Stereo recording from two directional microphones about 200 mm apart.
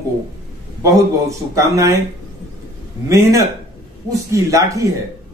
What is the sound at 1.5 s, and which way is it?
Speech, 15° right (ahead or behind).